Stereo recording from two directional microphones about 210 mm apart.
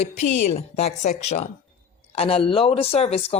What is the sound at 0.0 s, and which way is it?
A woman's voice, 30° left (ahead or behind).